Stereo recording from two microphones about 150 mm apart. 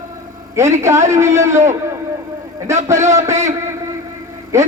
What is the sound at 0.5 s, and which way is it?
A man's voice, 20° right (ahead or behind).